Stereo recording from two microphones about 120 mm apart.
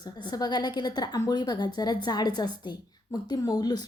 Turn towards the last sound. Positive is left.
turn(degrees=35)  # may be behind; listen again after turning